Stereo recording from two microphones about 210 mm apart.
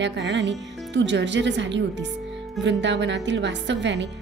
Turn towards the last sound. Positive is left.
turn(degrees=-55)  # may be behind; listen again after turning